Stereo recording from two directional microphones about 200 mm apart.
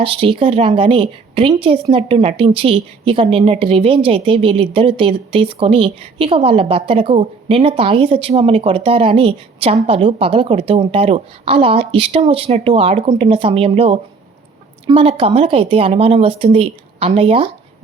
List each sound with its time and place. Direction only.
0.0 s speech: 25° right (ahead or behind)